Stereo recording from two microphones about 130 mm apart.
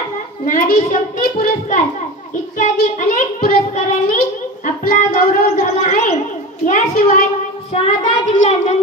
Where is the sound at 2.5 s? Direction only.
90° left.